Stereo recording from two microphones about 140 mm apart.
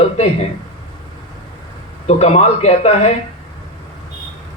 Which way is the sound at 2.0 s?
50° left (ahead or behind).